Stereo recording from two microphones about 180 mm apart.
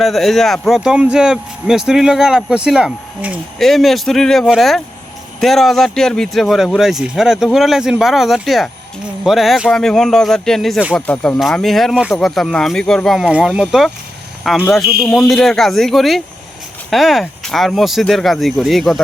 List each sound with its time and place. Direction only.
0.0 s speech: centre (ahead or behind)
10.9 s speech: 5° left (ahead or behind)